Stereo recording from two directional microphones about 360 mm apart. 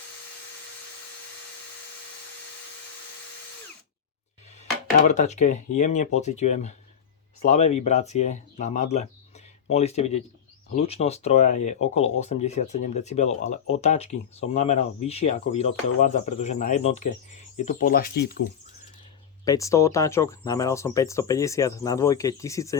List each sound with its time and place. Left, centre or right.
5.0 s speech: centre
19.5 s speech: centre